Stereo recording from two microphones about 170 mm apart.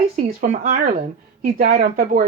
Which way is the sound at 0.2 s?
55° right (ahead or behind).